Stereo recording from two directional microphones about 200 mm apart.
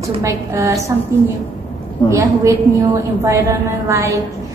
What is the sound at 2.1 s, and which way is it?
Speech, 15° right (ahead or behind).